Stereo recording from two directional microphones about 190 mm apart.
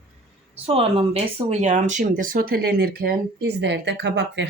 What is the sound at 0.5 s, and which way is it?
Speech, 30° right (ahead or behind).